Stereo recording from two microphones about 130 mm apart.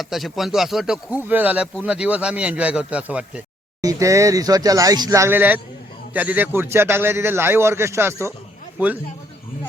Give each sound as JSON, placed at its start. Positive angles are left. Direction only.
{"t": 0.0, "sound": "speech", "side_deg": 0}
{"t": 3.8, "sound": "a man's voice", "side_deg": -25}